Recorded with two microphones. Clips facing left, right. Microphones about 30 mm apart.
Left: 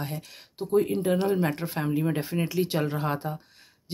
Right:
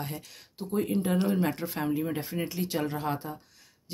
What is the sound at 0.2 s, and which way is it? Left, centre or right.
Speech, left.